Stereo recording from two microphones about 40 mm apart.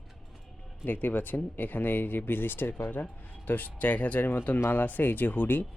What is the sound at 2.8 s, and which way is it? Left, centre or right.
Speech, left.